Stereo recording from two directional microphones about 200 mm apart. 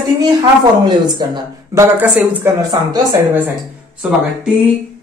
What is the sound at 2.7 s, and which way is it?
Speech, 20° right (ahead or behind).